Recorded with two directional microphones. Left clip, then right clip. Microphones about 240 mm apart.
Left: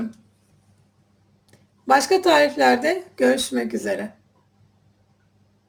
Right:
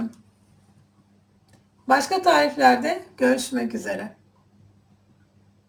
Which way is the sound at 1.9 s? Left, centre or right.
Left.